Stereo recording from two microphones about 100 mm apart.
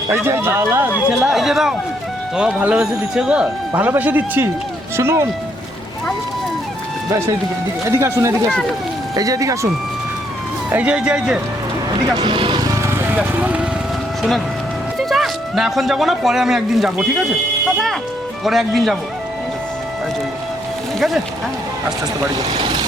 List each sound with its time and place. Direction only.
0.1 s speech: 25° right (ahead or behind)
1.0 s speech: 5° right (ahead or behind); by 5.3 s 25° right (ahead or behind)
7.9 s speech: 30° right (ahead or behind)
10.7 s speech: 15° right (ahead or behind)
12.1 s music: 50° right (ahead or behind)
12.6 s music: 30° right (ahead or behind); by 13.7 s 15° right (ahead or behind)
14.2 s speech: centre (ahead or behind)
18.4 s speech: centre (ahead or behind)
22.4 s speech: 45° right (ahead or behind)